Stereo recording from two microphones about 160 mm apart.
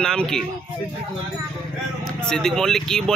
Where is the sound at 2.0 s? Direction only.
5° left (ahead or behind).